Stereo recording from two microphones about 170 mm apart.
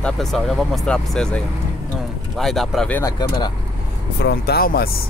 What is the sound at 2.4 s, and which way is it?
Speech, centre (ahead or behind).